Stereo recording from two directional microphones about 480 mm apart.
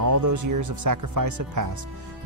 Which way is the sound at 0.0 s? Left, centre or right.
Right.